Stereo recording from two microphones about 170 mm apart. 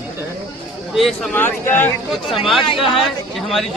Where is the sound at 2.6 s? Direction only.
30° left (ahead or behind).